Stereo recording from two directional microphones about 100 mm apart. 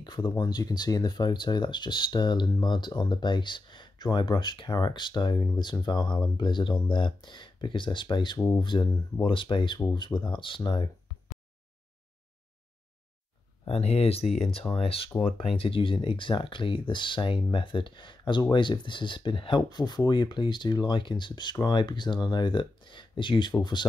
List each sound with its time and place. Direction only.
0.0 s speech: 50° left (ahead or behind)
13.7 s speech: 90° left
14.8 s speech: 70° left (ahead or behind); by 23.9 s 50° left (ahead or behind)